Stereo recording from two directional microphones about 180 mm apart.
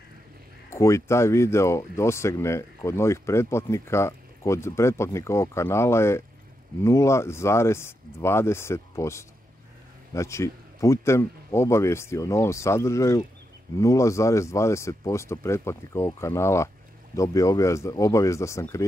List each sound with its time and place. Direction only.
0.7 s speech: 15° left (ahead or behind)